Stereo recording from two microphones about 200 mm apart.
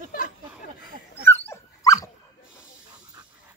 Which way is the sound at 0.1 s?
40° left (ahead or behind).